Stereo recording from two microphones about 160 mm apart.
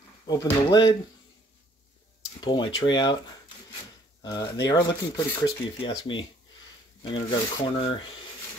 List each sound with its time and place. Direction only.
0.3 s speech: 25° left (ahead or behind)
2.4 s speech: 25° left (ahead or behind)